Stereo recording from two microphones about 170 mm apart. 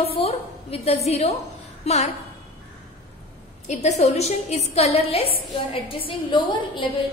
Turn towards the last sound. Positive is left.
turn(degrees=30)  # may be behind; listen again after turning